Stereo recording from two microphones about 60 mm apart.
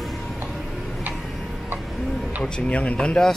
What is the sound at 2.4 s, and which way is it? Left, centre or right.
Speech, left.